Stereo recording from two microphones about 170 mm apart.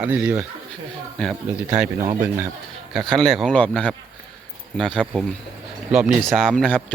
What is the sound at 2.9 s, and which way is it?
Speech, 5° left (ahead or behind).